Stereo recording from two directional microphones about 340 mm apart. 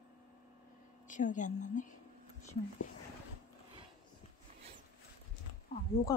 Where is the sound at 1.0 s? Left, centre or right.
Left.